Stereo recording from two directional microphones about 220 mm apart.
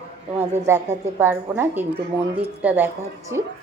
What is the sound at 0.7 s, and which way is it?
Speech, 10° right (ahead or behind).